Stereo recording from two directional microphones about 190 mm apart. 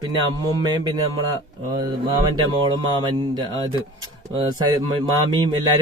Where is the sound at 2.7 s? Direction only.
20° right (ahead or behind).